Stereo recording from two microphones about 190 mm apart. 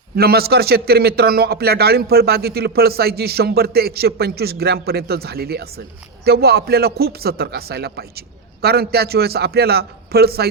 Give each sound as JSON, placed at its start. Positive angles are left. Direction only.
{"t": 0.2, "sound": "a man's voice", "side_deg": -55}